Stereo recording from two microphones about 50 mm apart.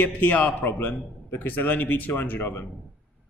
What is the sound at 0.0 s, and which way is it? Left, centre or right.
Speech, left.